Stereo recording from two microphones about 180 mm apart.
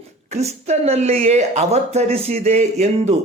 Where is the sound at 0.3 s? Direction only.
35° right (ahead or behind).